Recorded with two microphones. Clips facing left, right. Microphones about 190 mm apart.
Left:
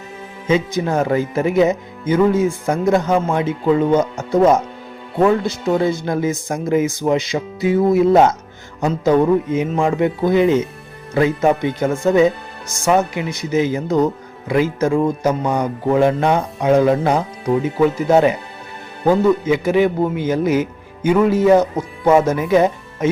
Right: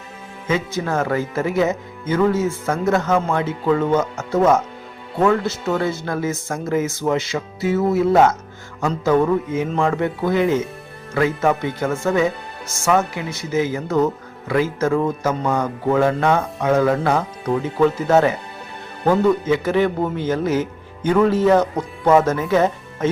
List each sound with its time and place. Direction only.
0.4 s speech: 15° left (ahead or behind)